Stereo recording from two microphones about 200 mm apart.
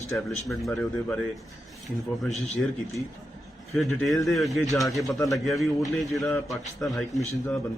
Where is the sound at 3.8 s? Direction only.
Centre (ahead or behind).